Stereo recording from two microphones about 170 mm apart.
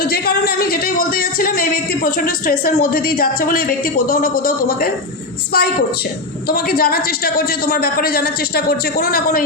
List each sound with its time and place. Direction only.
0.0 s speech: 65° left (ahead or behind)